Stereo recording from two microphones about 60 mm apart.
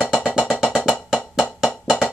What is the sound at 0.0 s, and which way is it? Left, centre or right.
Music, centre.